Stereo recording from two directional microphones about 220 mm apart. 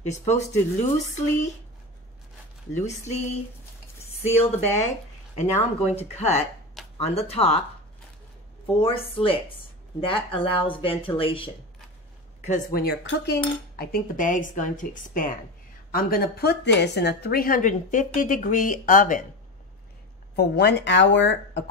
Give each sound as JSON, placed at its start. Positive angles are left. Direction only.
{"t": 0.0, "sound": "a woman's voice", "side_deg": 30}
{"t": 4.2, "sound": "a woman's voice", "side_deg": 30}
{"t": 8.8, "sound": "speech", "side_deg": 25}
{"t": 12.4, "sound": "a woman's voice", "side_deg": 40}
{"t": 20.3, "sound": "speech", "side_deg": 50}